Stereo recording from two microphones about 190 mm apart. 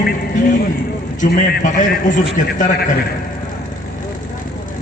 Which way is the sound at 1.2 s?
40° left (ahead or behind).